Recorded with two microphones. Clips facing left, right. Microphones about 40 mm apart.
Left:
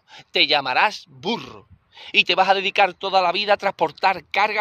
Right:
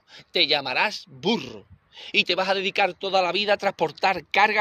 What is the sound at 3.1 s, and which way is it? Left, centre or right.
Speech, left.